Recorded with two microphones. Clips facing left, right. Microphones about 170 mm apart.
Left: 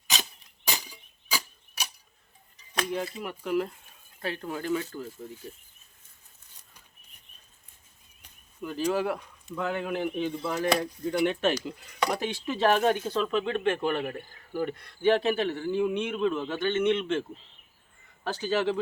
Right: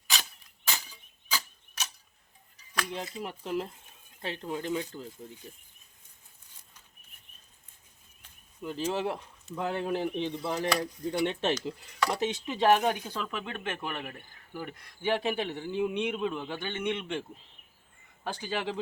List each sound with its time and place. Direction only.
0.1 s a sound: 20° left (ahead or behind)
2.9 s speech: 20° right (ahead or behind)
8.6 s speech: 25° right (ahead or behind)
10.7 s speech: 25° left (ahead or behind)
11.1 s speech: 25° right (ahead or behind); by 13.7 s 5° right (ahead or behind)
14.1 s speech: 35° left (ahead or behind)
14.7 s speech: 10° right (ahead or behind)
18.3 s speech: 15° right (ahead or behind)